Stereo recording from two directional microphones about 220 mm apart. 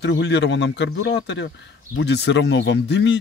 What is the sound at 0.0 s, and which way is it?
Speech, 50° left (ahead or behind).